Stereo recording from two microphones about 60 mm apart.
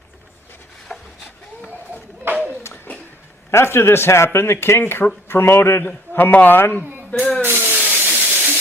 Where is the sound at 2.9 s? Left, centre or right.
Left.